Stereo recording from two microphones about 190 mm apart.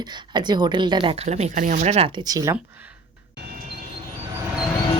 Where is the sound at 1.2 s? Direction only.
35° right (ahead or behind).